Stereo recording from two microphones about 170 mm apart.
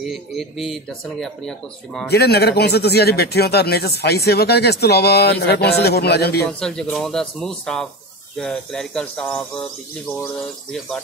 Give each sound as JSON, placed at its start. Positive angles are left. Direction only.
{"t": 0.0, "sound": "speech", "side_deg": 0}
{"t": 2.0, "sound": "speech", "side_deg": 70}
{"t": 6.6, "sound": "speech", "side_deg": 5}